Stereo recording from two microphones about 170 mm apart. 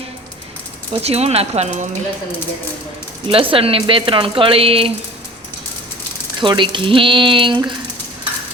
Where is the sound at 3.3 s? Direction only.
30° right (ahead or behind).